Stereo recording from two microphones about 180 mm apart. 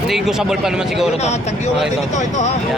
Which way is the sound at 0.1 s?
Centre (ahead or behind).